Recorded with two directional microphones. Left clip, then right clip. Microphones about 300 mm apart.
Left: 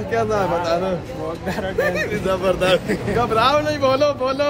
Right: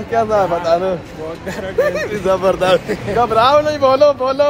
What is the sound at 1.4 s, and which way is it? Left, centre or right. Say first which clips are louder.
Speech: even; centre.